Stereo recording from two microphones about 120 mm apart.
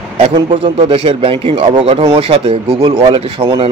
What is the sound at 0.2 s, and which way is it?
Speech, 45° right (ahead or behind).